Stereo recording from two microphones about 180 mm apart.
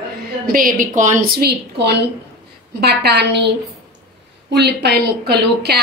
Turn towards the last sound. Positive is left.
turn(degrees=-65)  # may be behind; listen again after turning